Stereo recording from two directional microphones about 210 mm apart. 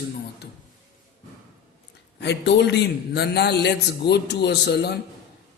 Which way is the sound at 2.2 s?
55° left (ahead or behind).